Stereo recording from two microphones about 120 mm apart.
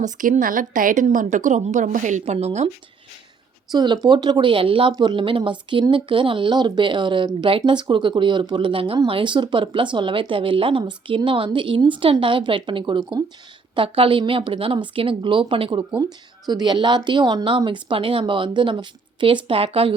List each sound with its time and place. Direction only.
0.0 s a woman's voice: 90° right; by 2.6 s 70° right (ahead or behind)
3.7 s speech: 35° right (ahead or behind); by 20.0 s 50° right (ahead or behind)